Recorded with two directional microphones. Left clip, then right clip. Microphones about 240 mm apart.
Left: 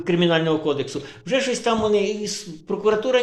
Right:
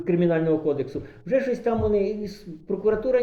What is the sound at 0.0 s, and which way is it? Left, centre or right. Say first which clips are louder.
A man's voice: left 3 dB; left.